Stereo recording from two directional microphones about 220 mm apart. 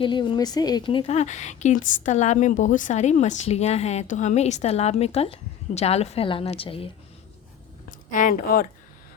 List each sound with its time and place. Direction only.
0.0 s speech: 20° left (ahead or behind)
7.9 s speech: 35° left (ahead or behind)